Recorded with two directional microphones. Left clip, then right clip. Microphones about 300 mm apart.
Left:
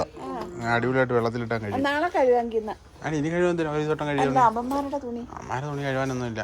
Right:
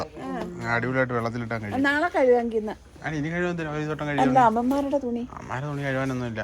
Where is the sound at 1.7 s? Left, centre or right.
Right.